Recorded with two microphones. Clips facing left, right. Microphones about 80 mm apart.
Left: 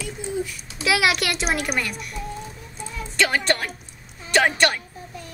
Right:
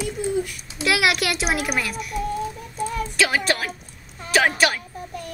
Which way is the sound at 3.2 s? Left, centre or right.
Centre.